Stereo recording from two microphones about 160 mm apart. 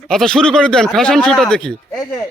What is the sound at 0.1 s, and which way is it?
Speech, 5° left (ahead or behind).